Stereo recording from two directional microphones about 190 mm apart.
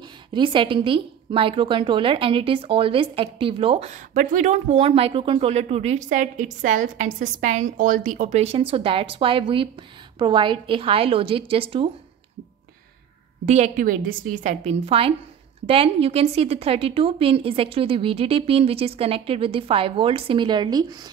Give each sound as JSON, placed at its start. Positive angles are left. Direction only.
{"t": 0.3, "sound": "a woman's voice", "side_deg": -25}
{"t": 13.5, "sound": "a woman's voice", "side_deg": -40}